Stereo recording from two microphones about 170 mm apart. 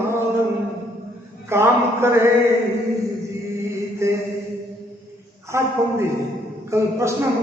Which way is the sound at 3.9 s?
15° right (ahead or behind).